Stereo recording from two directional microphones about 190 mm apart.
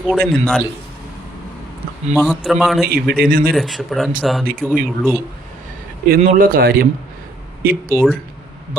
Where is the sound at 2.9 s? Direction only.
55° right (ahead or behind).